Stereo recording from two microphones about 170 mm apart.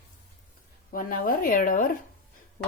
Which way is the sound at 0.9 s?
55° left (ahead or behind).